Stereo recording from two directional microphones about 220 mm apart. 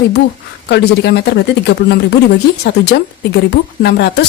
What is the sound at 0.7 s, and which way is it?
Speech, 50° left (ahead or behind).